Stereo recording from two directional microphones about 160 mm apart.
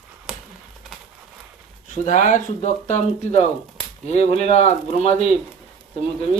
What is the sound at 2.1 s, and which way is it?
Speech, 50° left (ahead or behind).